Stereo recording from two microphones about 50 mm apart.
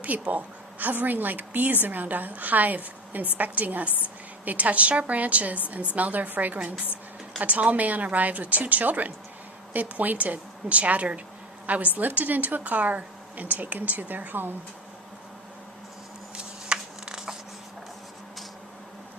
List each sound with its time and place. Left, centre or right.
0.0 s a woman's voice: right
16.3 s shuffling cards: centre